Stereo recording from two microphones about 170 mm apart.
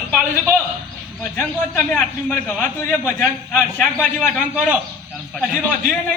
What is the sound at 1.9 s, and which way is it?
A man's voice, 10° left (ahead or behind).